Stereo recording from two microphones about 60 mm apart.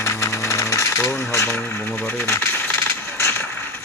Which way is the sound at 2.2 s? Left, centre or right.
Left.